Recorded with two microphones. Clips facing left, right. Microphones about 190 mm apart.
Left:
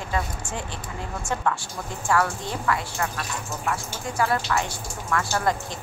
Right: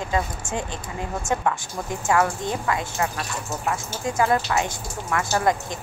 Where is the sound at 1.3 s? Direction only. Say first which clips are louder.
Right 2 dB; 15° right (ahead or behind).